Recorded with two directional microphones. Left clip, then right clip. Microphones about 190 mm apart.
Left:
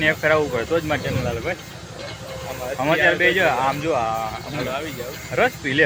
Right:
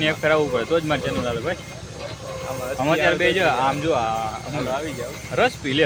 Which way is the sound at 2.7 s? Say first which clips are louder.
Left 2 dB; 5° right (ahead or behind).